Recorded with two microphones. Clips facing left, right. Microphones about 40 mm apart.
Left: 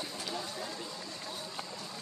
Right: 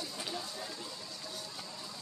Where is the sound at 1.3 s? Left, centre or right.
Left.